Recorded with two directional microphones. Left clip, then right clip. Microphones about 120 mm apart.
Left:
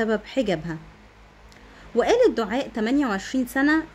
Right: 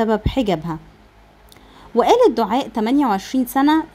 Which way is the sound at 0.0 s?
30° right (ahead or behind).